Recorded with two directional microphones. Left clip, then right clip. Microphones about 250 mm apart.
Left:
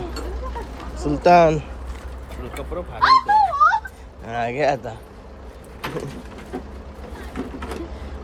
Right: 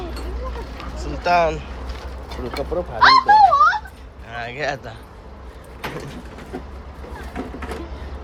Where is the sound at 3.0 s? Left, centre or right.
Right.